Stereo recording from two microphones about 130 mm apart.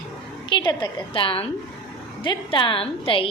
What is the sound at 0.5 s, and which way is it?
A woman's voice, 35° left (ahead or behind).